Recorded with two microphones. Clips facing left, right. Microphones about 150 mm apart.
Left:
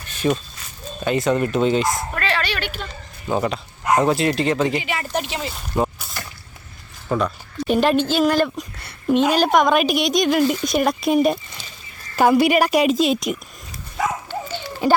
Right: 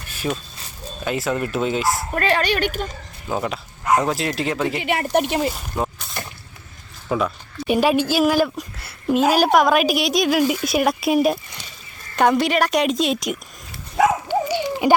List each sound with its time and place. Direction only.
0.1 s a sound: 5° right (ahead or behind)
1.0 s a woman's voice: 5° right (ahead or behind)
2.1 s speech: 45° right (ahead or behind)
3.2 s a woman's voice: centre (ahead or behind)
4.8 s speech: 60° right (ahead or behind)
5.5 s speech: centre (ahead or behind)
7.1 s a woman's voice: 5° right (ahead or behind)
14.3 s dog: 15° right (ahead or behind)